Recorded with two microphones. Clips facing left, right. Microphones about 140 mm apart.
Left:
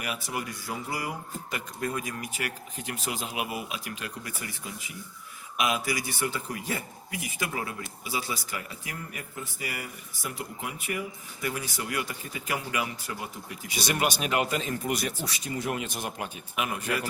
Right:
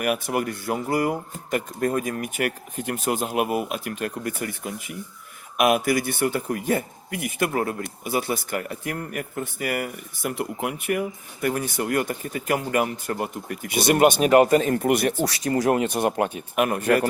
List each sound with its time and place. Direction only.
0.0 s a man's voice: 55° right (ahead or behind); by 15.7 s 75° right (ahead or behind)
15.7 s a man's voice: 60° right (ahead or behind)